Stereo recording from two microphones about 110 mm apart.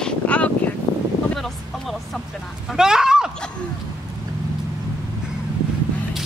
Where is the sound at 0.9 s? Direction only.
40° left (ahead or behind).